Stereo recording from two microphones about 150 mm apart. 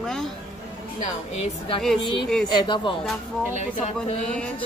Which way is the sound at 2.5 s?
30° left (ahead or behind).